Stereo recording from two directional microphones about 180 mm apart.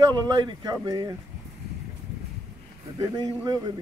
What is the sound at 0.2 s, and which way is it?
Speech, 25° right (ahead or behind).